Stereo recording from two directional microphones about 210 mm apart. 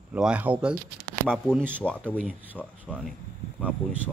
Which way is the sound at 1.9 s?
5° left (ahead or behind).